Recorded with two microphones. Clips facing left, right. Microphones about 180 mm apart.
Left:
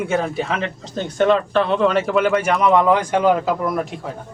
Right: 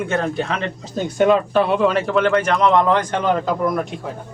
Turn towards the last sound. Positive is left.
turn(degrees=5)  # may be behind; listen again after turning